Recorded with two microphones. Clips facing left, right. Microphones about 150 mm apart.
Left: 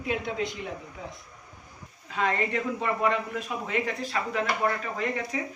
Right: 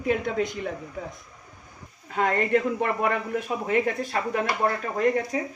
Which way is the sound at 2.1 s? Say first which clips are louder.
Right 4 dB; 50° right (ahead or behind).